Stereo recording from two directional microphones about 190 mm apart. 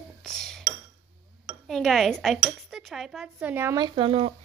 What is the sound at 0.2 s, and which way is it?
Cutlery, centre (ahead or behind).